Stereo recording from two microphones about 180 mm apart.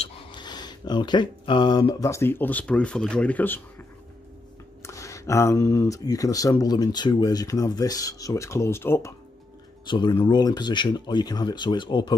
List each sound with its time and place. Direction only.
0.0 s speech: 25° left (ahead or behind)
4.8 s speech: 15° left (ahead or behind)
9.8 s speech: 25° left (ahead or behind)